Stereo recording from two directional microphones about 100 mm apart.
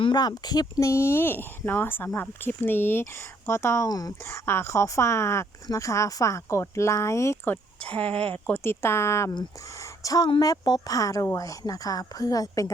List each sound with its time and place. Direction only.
0.0 s speech: 45° left (ahead or behind); by 3.8 s 25° left (ahead or behind)
3.8 s speech: 40° left (ahead or behind)
4.3 s speech: 25° left (ahead or behind)